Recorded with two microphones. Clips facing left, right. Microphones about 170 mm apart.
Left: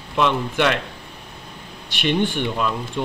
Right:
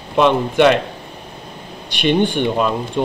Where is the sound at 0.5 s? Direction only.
20° right (ahead or behind).